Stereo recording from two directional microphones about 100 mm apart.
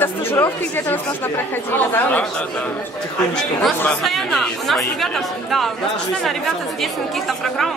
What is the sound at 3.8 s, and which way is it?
Speech, centre (ahead or behind).